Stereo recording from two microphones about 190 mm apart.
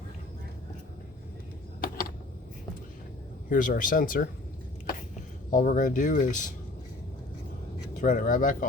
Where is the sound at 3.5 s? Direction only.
45° left (ahead or behind).